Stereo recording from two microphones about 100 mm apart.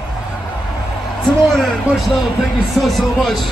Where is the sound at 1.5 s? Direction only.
5° left (ahead or behind).